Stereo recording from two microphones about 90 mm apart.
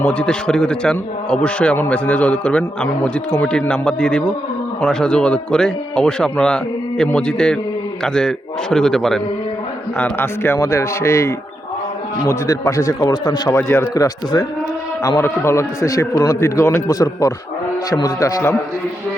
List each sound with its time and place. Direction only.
0.0 s a man's voice: 10° left (ahead or behind)
10.0 s a man's voice: 25° left (ahead or behind); by 14.4 s 45° left (ahead or behind)
15.2 s a man's voice: 30° left (ahead or behind)
16.9 s a man's voice: 40° left (ahead or behind)